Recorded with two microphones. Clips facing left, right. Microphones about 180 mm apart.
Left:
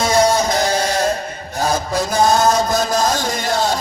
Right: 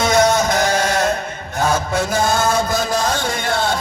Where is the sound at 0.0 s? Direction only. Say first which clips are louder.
Even; 30° left (ahead or behind).